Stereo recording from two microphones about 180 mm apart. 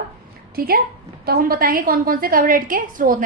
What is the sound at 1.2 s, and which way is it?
A woman's voice, 55° right (ahead or behind).